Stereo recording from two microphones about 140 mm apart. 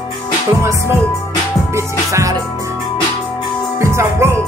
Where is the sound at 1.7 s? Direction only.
20° right (ahead or behind).